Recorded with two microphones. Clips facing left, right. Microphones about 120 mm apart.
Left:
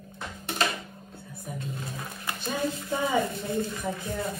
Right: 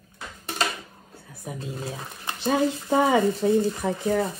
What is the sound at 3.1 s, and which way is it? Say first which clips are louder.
Speech: right 7 dB; 25° right (ahead or behind).